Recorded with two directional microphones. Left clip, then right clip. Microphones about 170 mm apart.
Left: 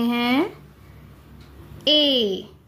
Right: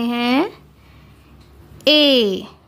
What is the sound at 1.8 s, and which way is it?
Speech, 50° right (ahead or behind).